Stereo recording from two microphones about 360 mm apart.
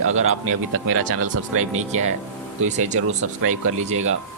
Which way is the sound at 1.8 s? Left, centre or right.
Centre.